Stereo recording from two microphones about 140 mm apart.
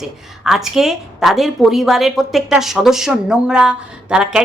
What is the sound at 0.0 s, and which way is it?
Speech, 5° right (ahead or behind).